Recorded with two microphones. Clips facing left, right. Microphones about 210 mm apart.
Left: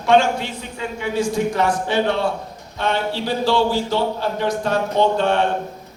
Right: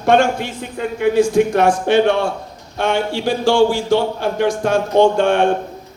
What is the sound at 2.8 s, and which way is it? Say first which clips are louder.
A man's voice: right 3 dB; 50° right (ahead or behind).